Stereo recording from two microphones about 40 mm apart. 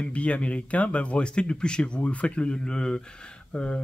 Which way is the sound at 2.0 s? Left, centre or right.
Left.